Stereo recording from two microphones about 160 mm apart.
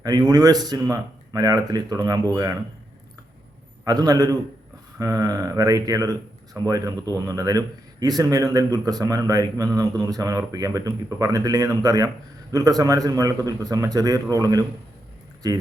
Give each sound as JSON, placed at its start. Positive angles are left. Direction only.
{"t": 0.0, "sound": "speech", "side_deg": -25}
{"t": 3.8, "sound": "speech", "side_deg": -25}